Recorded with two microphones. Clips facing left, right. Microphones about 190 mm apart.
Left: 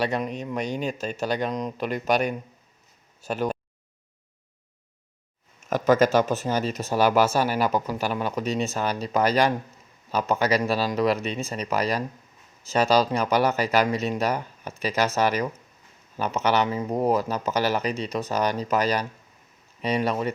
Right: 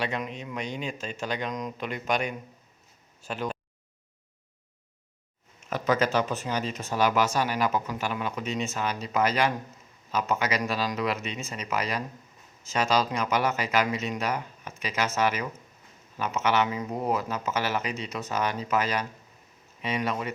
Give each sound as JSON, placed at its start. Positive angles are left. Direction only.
{"t": 0.0, "sound": "speech", "side_deg": 40}
{"t": 3.2, "sound": "a sound", "side_deg": 45}
{"t": 5.6, "sound": "speech", "side_deg": 45}